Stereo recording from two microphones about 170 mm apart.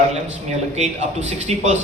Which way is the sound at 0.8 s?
40° right (ahead or behind).